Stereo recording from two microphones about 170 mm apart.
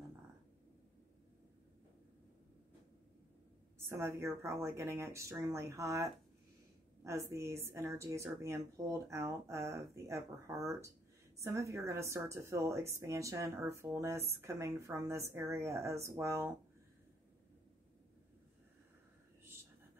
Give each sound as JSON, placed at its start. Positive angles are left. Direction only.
{"t": 3.9, "sound": "a woman's voice", "side_deg": -15}